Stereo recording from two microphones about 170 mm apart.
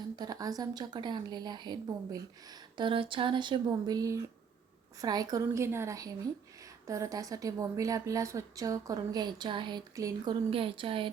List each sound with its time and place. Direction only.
0.2 s speech: 20° right (ahead or behind)
10.5 s speech: 30° right (ahead or behind)